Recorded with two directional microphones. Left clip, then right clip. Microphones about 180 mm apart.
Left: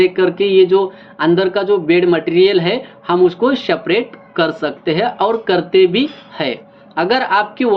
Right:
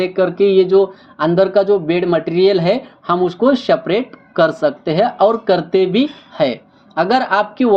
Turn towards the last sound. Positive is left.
turn(degrees=-45)  # may be behind; listen again after turning